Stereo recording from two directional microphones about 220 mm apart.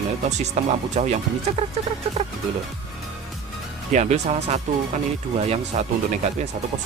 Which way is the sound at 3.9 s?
30° right (ahead or behind).